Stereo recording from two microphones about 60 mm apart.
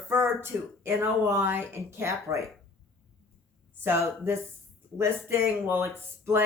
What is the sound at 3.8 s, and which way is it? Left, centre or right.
Speech, right.